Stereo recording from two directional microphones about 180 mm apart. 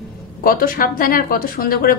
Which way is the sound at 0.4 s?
55° left (ahead or behind).